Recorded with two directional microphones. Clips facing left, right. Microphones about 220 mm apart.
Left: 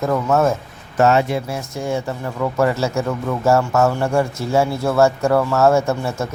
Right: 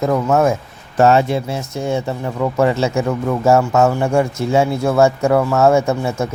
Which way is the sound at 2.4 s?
20° right (ahead or behind).